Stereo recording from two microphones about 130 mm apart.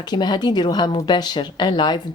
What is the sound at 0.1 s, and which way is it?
Speech, 35° left (ahead or behind).